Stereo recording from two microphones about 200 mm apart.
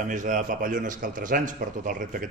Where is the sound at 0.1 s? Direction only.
40° right (ahead or behind).